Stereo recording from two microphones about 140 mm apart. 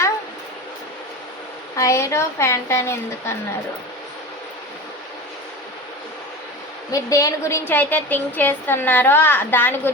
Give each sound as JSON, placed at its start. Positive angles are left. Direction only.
{"t": 1.7, "sound": "a woman's voice", "side_deg": 20}
{"t": 6.9, "sound": "a woman's voice", "side_deg": 25}